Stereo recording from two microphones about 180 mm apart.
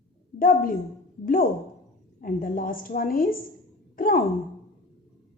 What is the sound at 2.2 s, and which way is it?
A woman's voice, 50° left (ahead or behind).